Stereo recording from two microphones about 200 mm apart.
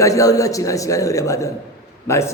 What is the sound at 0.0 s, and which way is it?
A man's voice, 15° left (ahead or behind).